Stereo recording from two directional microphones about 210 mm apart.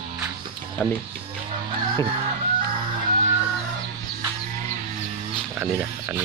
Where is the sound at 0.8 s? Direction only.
10° left (ahead or behind).